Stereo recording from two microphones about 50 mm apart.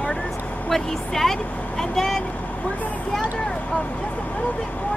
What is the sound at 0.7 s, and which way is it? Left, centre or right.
Speech, centre.